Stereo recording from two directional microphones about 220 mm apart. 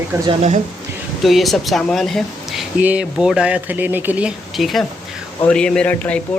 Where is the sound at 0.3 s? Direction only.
30° right (ahead or behind).